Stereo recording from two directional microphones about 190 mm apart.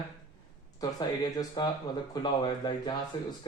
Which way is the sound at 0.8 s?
20° left (ahead or behind).